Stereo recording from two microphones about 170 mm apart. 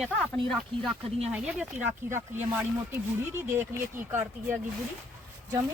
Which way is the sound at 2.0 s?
15° right (ahead or behind).